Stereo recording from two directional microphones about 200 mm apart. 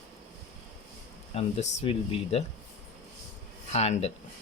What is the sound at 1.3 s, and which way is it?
Speech, 30° left (ahead or behind).